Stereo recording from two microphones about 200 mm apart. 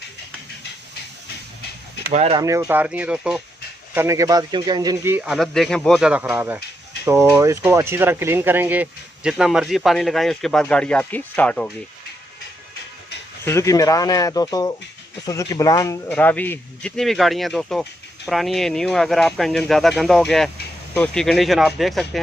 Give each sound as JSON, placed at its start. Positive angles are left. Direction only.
{"t": 2.1, "sound": "speech", "side_deg": -30}
{"t": 2.4, "sound": "speech", "side_deg": -15}
{"t": 5.1, "sound": "speech", "side_deg": -5}
{"t": 13.4, "sound": "speech", "side_deg": 15}